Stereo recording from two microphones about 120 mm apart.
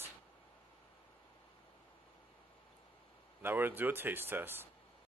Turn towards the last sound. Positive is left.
turn(degrees=-20)  # may be behind; listen again after turning